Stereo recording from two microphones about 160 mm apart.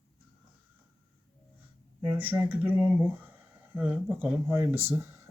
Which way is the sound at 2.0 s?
10° right (ahead or behind).